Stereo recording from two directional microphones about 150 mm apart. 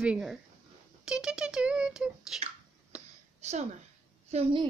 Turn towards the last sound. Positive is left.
turn(degrees=-40)  # may be behind; listen again after turning